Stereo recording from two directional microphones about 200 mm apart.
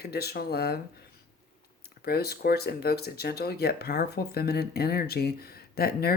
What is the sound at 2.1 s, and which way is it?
Speech, 50° left (ahead or behind).